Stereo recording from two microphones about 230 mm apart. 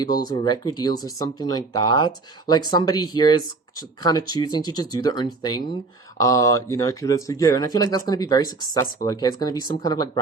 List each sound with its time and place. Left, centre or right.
0.0 s speech: centre